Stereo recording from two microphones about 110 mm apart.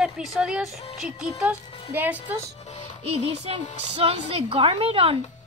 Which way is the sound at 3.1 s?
70° right (ahead or behind).